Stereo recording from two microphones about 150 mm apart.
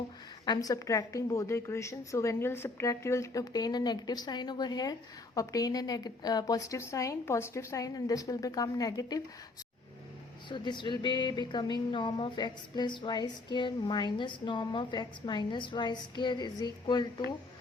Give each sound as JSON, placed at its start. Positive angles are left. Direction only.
{"t": 0.4, "sound": "a woman's voice", "side_deg": 25}
{"t": 10.5, "sound": "speech", "side_deg": 30}